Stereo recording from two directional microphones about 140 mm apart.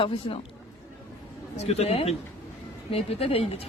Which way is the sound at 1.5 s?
50° left (ahead or behind).